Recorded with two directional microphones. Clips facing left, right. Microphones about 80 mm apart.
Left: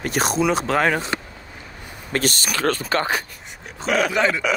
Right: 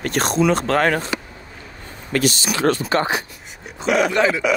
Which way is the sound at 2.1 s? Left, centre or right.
Left.